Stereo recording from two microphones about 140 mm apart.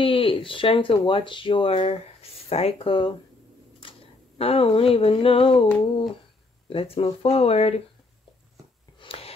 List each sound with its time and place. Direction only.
0.0 s speech: 40° left (ahead or behind)
4.4 s speech: 45° left (ahead or behind)
6.7 s speech: 40° left (ahead or behind)
9.0 s a sound: 40° left (ahead or behind)